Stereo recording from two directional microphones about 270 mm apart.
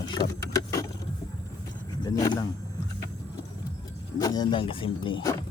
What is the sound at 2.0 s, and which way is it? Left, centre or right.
Speech, centre.